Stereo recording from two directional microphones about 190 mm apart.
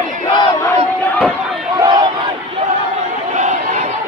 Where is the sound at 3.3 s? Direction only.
40° right (ahead or behind).